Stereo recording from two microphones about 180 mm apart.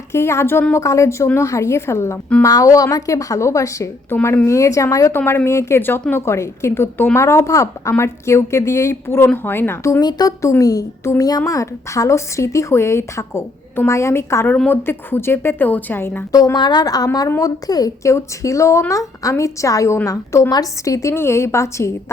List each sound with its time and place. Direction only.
0.1 s a woman's voice: 15° left (ahead or behind)